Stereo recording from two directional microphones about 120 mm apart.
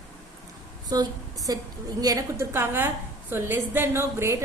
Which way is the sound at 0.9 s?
30° right (ahead or behind).